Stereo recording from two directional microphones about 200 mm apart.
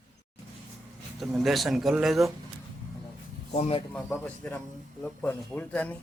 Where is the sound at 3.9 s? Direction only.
5° left (ahead or behind).